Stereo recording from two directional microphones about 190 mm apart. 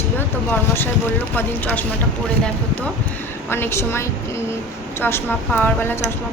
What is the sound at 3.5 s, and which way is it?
A woman's voice, 10° left (ahead or behind).